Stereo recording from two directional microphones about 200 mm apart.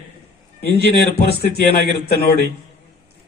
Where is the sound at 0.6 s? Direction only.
55° left (ahead or behind).